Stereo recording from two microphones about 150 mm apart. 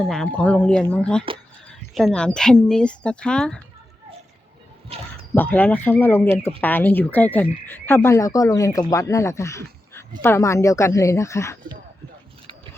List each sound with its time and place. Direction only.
0.0 s frog: 5° left (ahead or behind)
2.0 s speech: 5° left (ahead or behind)
4.9 s speech: 40° right (ahead or behind)
5.3 s frog: 10° left (ahead or behind)
10.2 s a woman's voice: 15° left (ahead or behind)